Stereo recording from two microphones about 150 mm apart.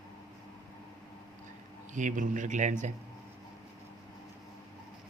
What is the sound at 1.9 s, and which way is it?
Speech, 60° right (ahead or behind).